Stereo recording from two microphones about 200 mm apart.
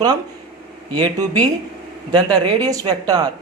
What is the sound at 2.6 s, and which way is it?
Speech, 20° right (ahead or behind).